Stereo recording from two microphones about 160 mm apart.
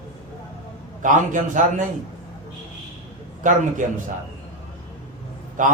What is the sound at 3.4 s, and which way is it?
Speech, 55° right (ahead or behind).